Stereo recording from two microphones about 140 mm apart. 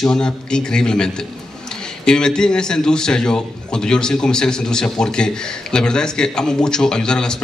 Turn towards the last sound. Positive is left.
turn(degrees=5)  # may be behind; listen again after turning